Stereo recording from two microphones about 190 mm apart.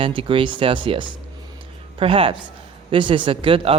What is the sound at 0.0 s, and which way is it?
Speech, 25° right (ahead or behind).